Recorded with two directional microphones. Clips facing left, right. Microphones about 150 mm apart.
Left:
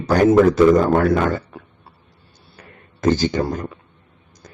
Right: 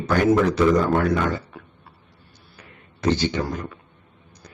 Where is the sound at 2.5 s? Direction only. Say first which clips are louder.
Left 4 dB; 45° left (ahead or behind).